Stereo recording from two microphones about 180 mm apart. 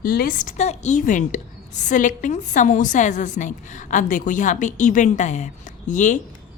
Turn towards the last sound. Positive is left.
turn(degrees=45)  # may be behind; listen again after turning